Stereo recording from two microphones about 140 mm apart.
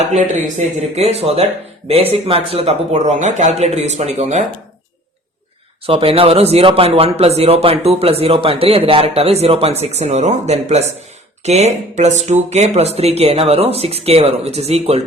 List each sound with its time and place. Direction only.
0.1 s speech: 60° right (ahead or behind)
5.8 s speech: 40° right (ahead or behind)